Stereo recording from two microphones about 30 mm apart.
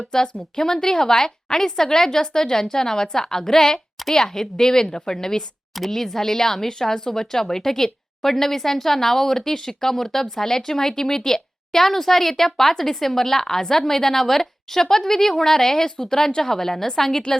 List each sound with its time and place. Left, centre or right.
0.1 s a woman's voice: centre